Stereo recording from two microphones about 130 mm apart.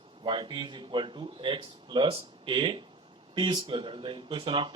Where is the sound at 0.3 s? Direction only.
40° right (ahead or behind).